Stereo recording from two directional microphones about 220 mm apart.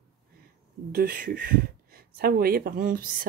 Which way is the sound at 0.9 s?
40° right (ahead or behind).